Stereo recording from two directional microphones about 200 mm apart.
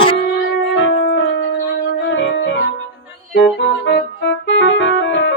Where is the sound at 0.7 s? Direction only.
70° left (ahead or behind).